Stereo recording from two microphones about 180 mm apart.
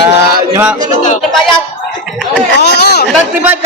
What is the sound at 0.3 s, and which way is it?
Chant, 15° right (ahead or behind).